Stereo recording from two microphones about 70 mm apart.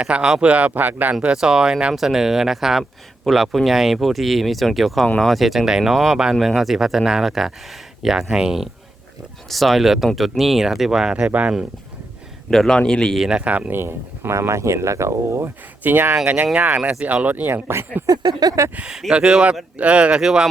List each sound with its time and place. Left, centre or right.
0.0 s speech: centre
1.2 s speech: centre
11.3 s speech: right
12.5 s a man's voice: centre
13.1 s speech: centre
13.7 s speech: right
15.8 s speech: right
18.0 s a sound: right
18.8 s speech: centre